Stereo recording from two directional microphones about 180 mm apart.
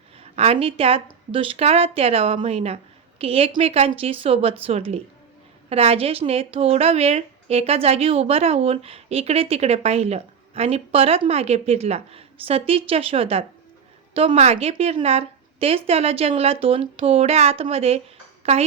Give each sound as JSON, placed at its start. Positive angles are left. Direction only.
{"t": 0.2, "sound": "a woman's voice", "side_deg": -35}